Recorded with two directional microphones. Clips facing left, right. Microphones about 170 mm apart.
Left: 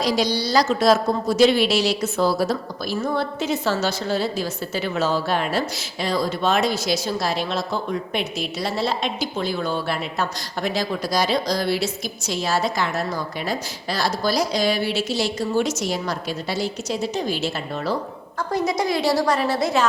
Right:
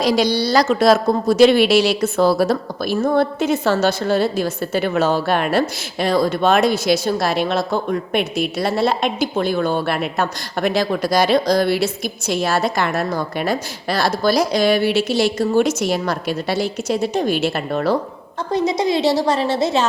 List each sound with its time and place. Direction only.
0.0 s speech: 65° right (ahead or behind)
18.5 s a woman's voice: 20° right (ahead or behind)